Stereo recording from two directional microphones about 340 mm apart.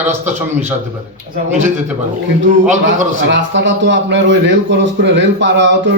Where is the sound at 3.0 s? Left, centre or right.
Right.